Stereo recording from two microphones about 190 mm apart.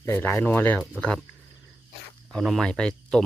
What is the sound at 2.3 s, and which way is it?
Speech, centre (ahead or behind).